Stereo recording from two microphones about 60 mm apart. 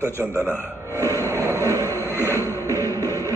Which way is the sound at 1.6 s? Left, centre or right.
Left.